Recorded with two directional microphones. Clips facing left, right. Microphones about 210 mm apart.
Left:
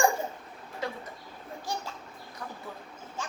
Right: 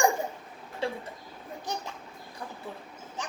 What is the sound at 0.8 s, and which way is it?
Speech, 30° right (ahead or behind).